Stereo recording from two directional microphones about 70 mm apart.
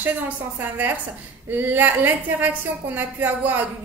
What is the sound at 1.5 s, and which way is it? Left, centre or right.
A woman's voice, right.